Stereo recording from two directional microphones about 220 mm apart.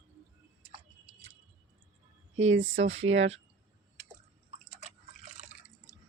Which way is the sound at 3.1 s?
60° right (ahead or behind).